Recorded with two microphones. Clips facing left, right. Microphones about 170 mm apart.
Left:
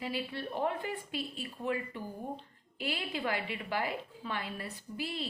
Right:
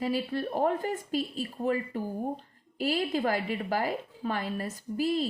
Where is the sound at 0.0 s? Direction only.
45° right (ahead or behind).